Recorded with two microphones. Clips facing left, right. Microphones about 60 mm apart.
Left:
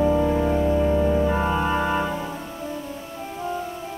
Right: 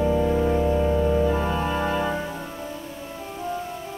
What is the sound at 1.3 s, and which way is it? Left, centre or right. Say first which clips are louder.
Organ: left 2 dB; centre.